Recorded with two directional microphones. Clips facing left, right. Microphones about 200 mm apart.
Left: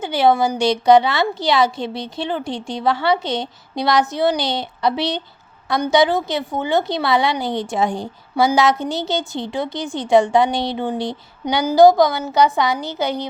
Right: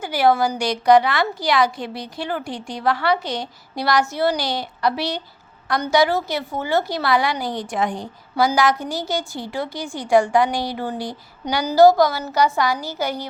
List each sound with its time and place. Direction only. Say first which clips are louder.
0.0 s a woman's voice: left 2 dB; 20° left (ahead or behind)